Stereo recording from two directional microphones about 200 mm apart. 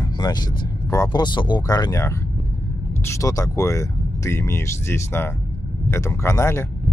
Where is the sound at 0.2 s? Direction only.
20° left (ahead or behind).